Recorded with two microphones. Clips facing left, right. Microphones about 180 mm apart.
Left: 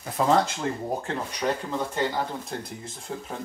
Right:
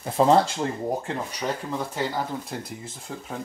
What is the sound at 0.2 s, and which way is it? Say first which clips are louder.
Speech: right 4 dB; 25° right (ahead or behind).